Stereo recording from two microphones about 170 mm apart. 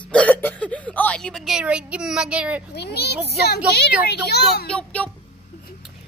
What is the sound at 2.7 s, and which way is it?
A woman's voice, 75° left (ahead or behind).